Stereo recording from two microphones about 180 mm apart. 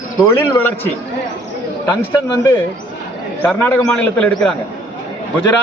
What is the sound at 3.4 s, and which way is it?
A man's voice, 10° left (ahead or behind).